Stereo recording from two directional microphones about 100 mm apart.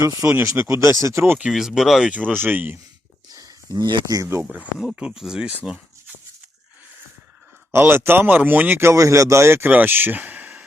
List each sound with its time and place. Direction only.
0.0 s speech: 30° right (ahead or behind)
1.4 s speech: 5° right (ahead or behind)
2.1 s speech: 15° right (ahead or behind)
3.3 s a sound: 40° right (ahead or behind)
4.2 s speech: 25° right (ahead or behind)
4.5 s speech: 15° right (ahead or behind)
7.7 s speech: 25° right (ahead or behind)